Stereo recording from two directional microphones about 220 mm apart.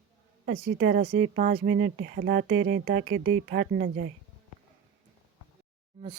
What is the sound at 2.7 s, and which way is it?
Speech, 45° right (ahead or behind).